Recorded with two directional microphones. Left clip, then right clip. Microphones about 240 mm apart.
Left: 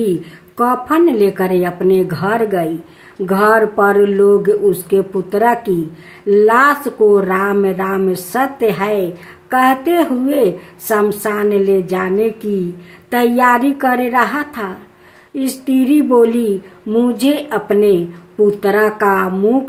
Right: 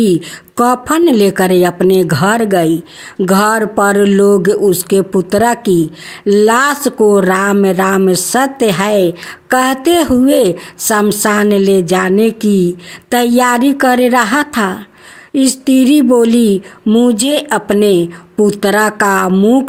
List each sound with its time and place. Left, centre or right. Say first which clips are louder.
0.5 s speech: right 2 dB; right